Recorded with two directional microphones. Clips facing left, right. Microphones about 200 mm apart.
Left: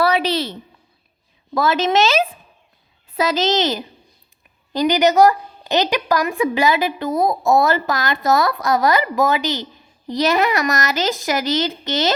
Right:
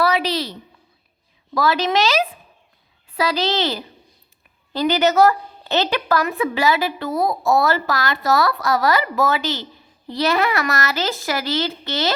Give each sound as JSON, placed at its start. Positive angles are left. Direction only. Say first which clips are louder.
{"t": 0.0, "sound": "a woman's voice", "louder": "left 2 dB", "side_deg": 30}
{"t": 1.5, "sound": "a woman's voice", "louder": "left 2 dB", "side_deg": 20}